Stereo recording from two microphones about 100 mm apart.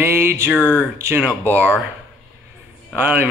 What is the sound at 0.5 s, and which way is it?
Speech, 15° left (ahead or behind).